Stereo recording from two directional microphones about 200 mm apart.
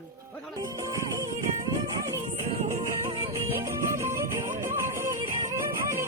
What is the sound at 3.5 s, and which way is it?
Music, 15° right (ahead or behind).